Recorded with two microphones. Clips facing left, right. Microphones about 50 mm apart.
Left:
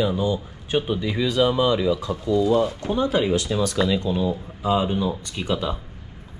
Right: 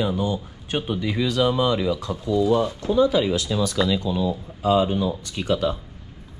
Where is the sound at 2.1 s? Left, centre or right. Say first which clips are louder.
Right 1 dB; left.